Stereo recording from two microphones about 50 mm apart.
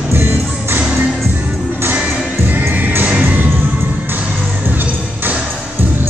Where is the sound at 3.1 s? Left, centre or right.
Right.